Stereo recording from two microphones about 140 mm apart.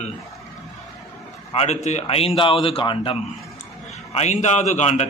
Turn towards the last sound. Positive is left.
turn(degrees=50)  # may be behind; listen again after turning